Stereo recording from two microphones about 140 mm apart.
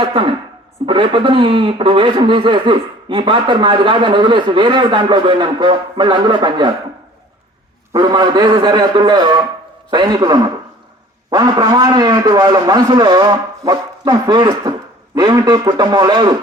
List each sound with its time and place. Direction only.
0.0 s a man's voice: 40° right (ahead or behind)
7.9 s a man's voice: 30° right (ahead or behind)